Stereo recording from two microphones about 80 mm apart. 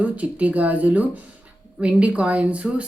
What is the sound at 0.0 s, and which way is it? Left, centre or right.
Speech, centre.